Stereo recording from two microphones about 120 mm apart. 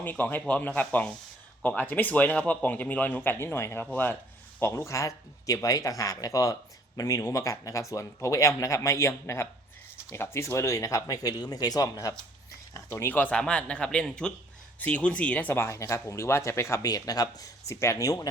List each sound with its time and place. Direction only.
0.0 s speech: 15° left (ahead or behind)